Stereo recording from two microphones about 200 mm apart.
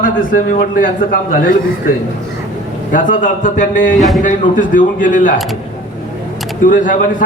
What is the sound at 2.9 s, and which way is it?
Speech, 40° left (ahead or behind).